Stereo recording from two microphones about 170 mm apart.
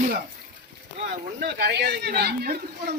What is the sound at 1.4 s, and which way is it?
Speech, 75° right (ahead or behind).